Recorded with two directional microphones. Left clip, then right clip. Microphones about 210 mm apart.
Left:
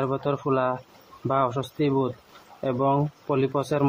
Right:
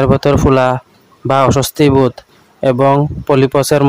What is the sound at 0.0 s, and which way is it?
Speech, 60° right (ahead or behind).